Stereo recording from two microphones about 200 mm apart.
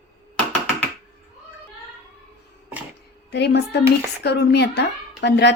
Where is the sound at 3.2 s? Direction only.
55° left (ahead or behind).